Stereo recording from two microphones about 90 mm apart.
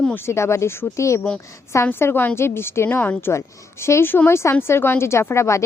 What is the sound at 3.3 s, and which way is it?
A woman's voice, 30° left (ahead or behind).